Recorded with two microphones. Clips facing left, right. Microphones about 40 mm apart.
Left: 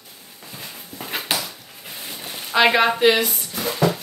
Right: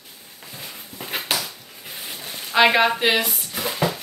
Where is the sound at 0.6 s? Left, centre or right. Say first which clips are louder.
Left 1 dB; centre.